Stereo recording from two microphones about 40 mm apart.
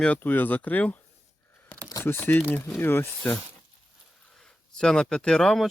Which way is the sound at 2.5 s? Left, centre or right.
Left.